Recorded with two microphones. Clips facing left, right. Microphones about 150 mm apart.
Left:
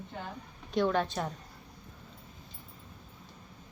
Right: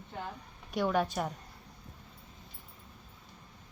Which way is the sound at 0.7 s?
10° right (ahead or behind).